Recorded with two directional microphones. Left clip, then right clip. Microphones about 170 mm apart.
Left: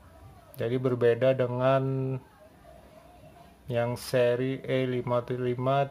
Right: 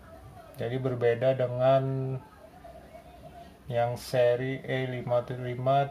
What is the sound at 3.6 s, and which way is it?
Speech, 35° left (ahead or behind).